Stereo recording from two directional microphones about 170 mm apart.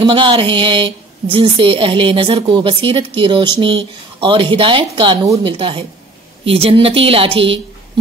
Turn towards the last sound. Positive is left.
turn(degrees=-35)  # may be behind; listen again after turning